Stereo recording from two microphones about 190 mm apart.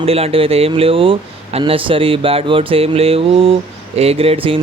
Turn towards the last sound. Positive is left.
turn(degrees=-30)  # may be behind; listen again after turning